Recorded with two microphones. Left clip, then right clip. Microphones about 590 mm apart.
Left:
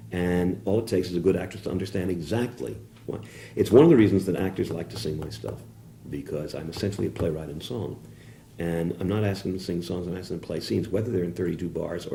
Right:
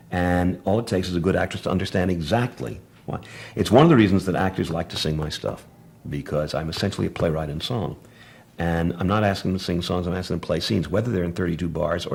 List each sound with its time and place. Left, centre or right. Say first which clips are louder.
0.6 s speech: right 2 dB; right